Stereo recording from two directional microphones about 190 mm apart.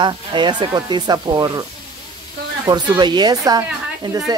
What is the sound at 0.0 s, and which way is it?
Speech, 25° right (ahead or behind).